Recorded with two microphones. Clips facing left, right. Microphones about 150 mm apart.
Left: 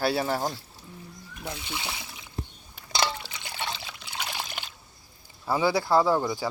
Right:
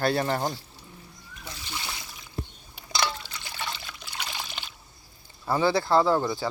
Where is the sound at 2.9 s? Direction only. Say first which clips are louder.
Left 1 dB; 15° left (ahead or behind).